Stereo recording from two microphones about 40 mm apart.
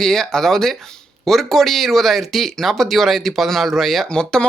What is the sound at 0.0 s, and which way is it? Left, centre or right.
Speech, centre.